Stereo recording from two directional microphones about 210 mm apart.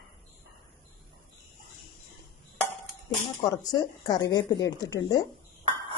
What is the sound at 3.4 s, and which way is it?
Speech, 15° left (ahead or behind).